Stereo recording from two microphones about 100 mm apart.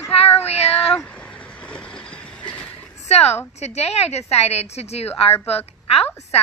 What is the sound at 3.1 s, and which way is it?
A woman's voice, 90° left.